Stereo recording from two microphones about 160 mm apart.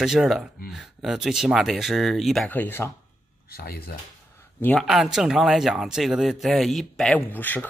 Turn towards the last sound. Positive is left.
turn(degrees=10)  # may be behind; listen again after turning